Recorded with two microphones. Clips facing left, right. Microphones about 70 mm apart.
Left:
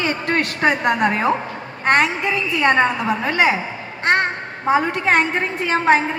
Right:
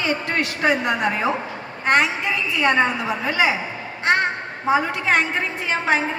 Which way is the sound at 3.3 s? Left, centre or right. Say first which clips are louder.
Left 2 dB; left.